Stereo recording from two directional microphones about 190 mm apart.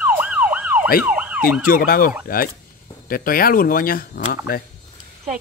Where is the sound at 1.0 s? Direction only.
5° right (ahead or behind).